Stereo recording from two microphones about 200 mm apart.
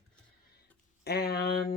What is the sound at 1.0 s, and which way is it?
Speech, 50° left (ahead or behind).